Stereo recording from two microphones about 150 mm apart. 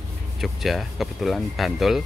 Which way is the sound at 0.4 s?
Centre (ahead or behind).